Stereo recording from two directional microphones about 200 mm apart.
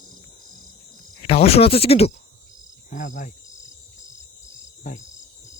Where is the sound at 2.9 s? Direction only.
40° left (ahead or behind).